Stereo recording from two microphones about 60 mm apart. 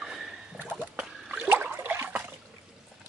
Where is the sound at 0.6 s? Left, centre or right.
Right.